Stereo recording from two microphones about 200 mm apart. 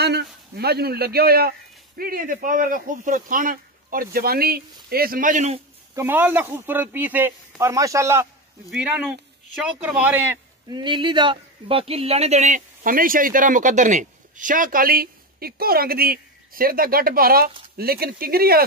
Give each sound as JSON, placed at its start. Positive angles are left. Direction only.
{"t": 0.0, "sound": "speech", "side_deg": -55}
{"t": 5.9, "sound": "speech", "side_deg": -10}
{"t": 10.7, "sound": "speech", "side_deg": -25}